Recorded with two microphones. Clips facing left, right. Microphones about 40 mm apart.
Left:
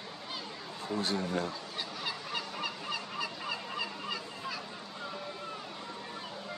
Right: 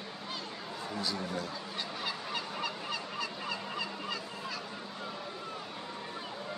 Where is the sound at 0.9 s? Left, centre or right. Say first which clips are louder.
Left 4 dB; left.